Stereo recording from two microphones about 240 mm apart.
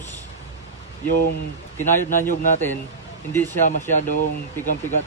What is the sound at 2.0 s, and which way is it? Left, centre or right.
Speech, left.